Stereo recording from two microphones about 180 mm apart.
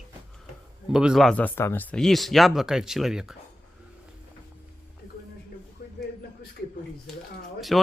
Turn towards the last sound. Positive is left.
turn(degrees=0)  # may be behind; listen again after turning